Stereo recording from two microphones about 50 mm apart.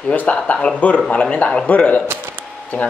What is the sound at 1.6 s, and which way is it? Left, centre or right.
Speech, left.